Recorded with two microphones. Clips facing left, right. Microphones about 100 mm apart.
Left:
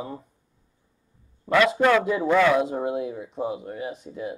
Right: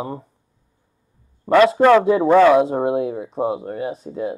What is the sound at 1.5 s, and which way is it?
Speech, 35° right (ahead or behind).